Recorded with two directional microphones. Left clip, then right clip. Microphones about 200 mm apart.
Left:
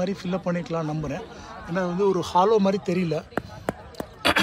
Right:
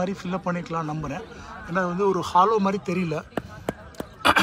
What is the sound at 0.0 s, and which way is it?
A man's voice, 10° left (ahead or behind).